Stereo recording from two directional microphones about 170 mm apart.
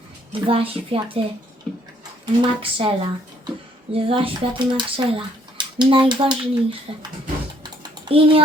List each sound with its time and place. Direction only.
0.4 s speech: 30° right (ahead or behind)
2.2 s speech: 30° right (ahead or behind)
7.6 s typing: 30° right (ahead or behind)